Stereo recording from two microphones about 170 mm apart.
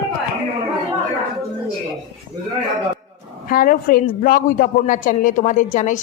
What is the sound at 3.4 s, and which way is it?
A woman's voice, 55° left (ahead or behind).